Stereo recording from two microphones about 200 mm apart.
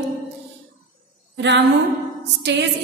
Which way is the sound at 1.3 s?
60° right (ahead or behind).